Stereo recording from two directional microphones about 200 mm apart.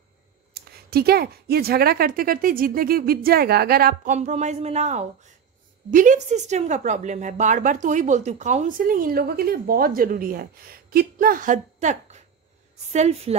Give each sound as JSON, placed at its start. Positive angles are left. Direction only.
{"t": 0.6, "sound": "a woman's voice", "side_deg": -50}